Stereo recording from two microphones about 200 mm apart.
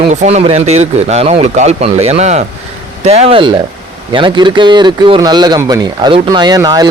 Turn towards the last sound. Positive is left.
turn(degrees=-20)  # may be behind; listen again after turning